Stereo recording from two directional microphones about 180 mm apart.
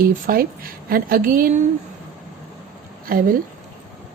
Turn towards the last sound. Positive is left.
turn(degrees=-50)  # may be behind; listen again after turning